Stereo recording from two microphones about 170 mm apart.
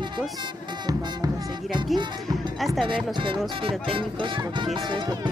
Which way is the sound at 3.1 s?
30° right (ahead or behind).